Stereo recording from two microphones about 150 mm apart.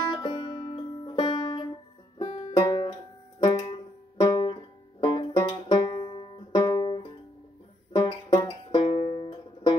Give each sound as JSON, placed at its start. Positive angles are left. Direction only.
{"t": 0.1, "sound": "music", "side_deg": 30}
{"t": 3.4, "sound": "banjo", "side_deg": 35}
{"t": 6.7, "sound": "music", "side_deg": 30}
{"t": 8.8, "sound": "banjo", "side_deg": 35}